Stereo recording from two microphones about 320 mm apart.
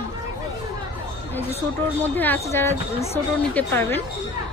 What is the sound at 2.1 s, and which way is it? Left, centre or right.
A woman's voice, centre.